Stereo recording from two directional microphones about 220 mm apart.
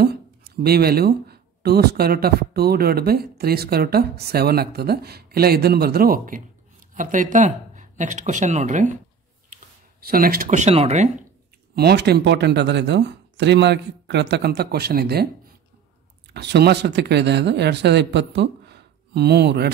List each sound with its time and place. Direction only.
0.7 s speech: 45° right (ahead or behind); by 11.1 s 30° right (ahead or behind)
11.7 s speech: 45° right (ahead or behind)
16.3 s speech: 50° right (ahead or behind)